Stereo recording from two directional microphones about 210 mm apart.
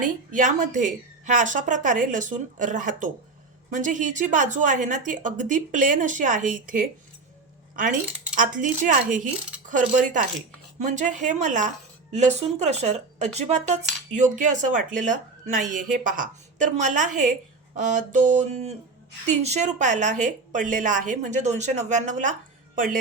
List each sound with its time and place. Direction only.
0.3 s speech: 40° right (ahead or behind)
8.4 s speech: 40° right (ahead or behind)